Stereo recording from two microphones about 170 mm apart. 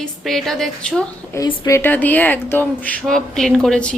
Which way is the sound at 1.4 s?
20° left (ahead or behind).